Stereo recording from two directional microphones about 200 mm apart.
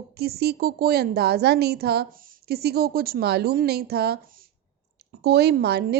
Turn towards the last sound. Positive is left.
turn(degrees=-55)  # may be behind; listen again after turning